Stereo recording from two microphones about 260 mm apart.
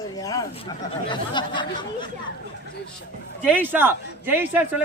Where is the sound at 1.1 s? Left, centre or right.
Centre.